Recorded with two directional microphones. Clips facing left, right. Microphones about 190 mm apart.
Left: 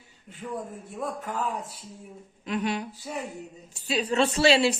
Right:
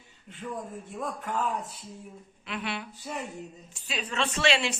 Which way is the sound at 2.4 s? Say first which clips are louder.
Left 7 dB; 40° left (ahead or behind).